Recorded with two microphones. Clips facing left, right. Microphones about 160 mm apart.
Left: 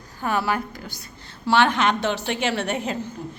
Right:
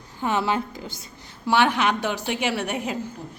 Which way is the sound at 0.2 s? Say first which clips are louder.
Even; 20° right (ahead or behind).